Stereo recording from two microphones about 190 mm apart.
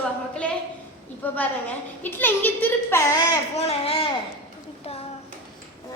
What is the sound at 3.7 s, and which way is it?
Speech, 30° left (ahead or behind).